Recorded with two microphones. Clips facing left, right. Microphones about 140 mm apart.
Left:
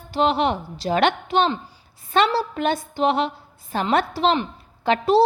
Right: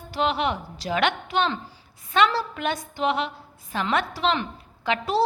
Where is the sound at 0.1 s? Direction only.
30° left (ahead or behind).